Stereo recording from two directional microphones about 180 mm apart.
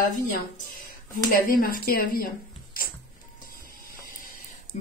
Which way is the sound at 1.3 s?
55° left (ahead or behind).